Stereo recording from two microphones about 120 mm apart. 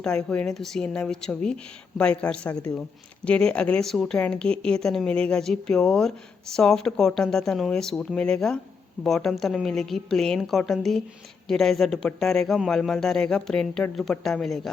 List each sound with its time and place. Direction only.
0.0 s a man's voice: 5° left (ahead or behind)